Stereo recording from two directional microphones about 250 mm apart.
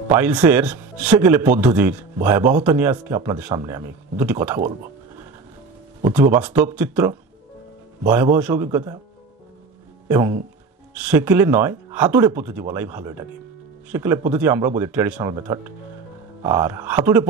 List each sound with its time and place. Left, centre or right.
0.1 s speech: centre
6.0 s speech: centre
10.0 s speech: centre